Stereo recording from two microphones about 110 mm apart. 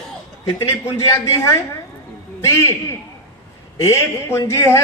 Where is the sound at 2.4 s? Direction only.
25° left (ahead or behind).